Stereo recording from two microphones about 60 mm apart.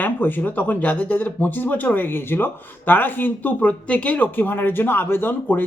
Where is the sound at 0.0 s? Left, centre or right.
Left.